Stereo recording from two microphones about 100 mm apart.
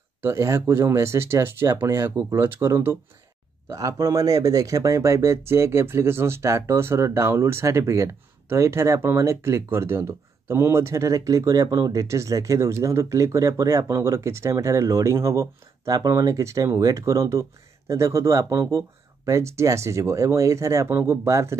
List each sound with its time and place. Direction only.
0.2 s speech: 30° right (ahead or behind)